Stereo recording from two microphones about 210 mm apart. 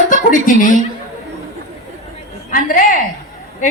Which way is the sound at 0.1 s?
40° left (ahead or behind).